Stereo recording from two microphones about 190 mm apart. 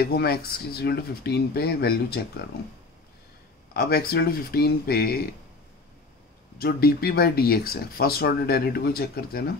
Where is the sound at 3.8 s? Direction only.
55° left (ahead or behind).